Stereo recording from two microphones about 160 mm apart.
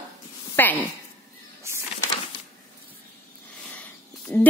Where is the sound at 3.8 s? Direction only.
10° left (ahead or behind).